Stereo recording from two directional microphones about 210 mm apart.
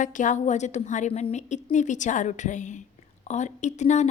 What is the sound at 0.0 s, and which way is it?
A woman's voice, 35° left (ahead or behind).